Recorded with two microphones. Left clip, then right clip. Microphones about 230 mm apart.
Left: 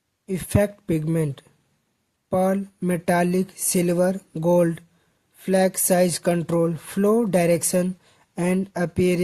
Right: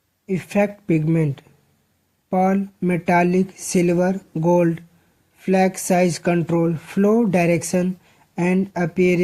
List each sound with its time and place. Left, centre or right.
0.3 s speech: left